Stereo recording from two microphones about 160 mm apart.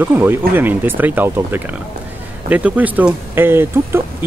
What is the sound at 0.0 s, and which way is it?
Speech, 10° right (ahead or behind).